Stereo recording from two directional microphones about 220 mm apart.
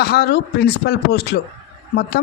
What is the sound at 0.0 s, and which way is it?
Speech, 45° left (ahead or behind).